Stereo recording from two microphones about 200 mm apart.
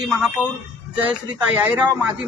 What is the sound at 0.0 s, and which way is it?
Speech, 5° right (ahead or behind).